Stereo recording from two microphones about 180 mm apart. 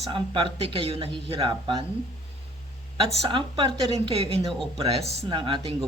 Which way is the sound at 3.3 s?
30° right (ahead or behind).